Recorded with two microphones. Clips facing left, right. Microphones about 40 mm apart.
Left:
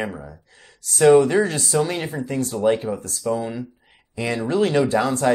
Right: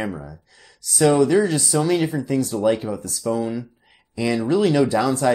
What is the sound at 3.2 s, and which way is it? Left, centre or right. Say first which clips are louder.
Speech: even; centre.